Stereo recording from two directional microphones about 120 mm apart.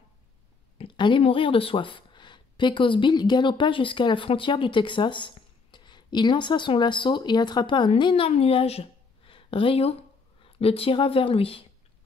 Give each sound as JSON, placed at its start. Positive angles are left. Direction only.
{"t": 0.7, "sound": "speech", "side_deg": 45}